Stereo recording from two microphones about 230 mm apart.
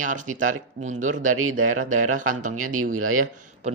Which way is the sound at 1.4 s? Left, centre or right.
Right.